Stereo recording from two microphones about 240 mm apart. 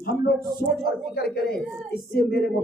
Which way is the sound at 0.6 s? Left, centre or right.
Left.